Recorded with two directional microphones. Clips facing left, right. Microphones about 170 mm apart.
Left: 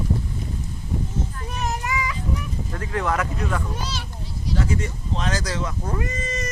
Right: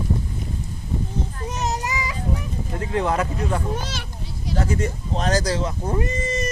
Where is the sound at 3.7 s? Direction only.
50° right (ahead or behind).